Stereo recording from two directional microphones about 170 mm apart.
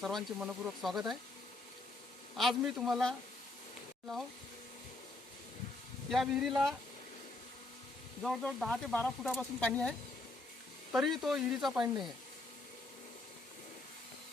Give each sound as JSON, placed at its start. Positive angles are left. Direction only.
{"t": 0.0, "sound": "speech", "side_deg": 0}
{"t": 2.3, "sound": "speech", "side_deg": 0}
{"t": 6.1, "sound": "speech", "side_deg": 0}
{"t": 8.2, "sound": "speech", "side_deg": 0}
{"t": 10.9, "sound": "speech", "side_deg": 0}